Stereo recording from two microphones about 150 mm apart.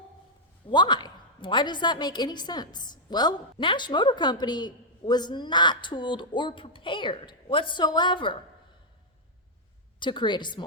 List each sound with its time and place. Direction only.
0.7 s a woman's voice: 30° left (ahead or behind)
10.0 s a woman's voice: 30° left (ahead or behind)